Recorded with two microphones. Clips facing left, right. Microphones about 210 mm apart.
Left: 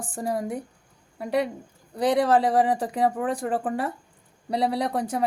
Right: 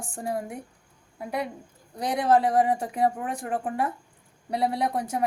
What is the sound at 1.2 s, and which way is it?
Speech, 75° left (ahead or behind).